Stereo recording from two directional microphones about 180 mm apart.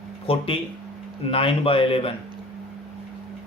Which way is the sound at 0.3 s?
30° left (ahead or behind).